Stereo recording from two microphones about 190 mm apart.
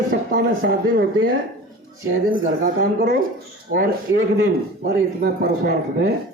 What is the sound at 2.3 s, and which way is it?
Speech, 55° right (ahead or behind).